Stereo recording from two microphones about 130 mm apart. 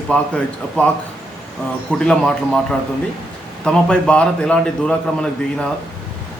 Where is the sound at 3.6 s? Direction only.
5° left (ahead or behind).